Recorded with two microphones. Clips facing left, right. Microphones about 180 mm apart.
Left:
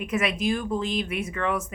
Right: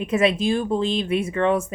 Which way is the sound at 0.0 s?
30° right (ahead or behind).